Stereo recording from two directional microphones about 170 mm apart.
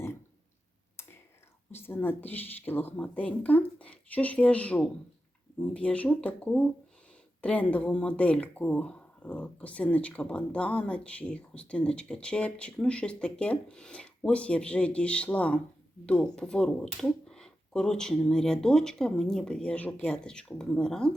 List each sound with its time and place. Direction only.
1.7 s speech: 15° left (ahead or behind)